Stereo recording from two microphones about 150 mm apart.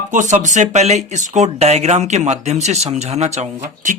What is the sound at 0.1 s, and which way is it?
Speech, 55° right (ahead or behind).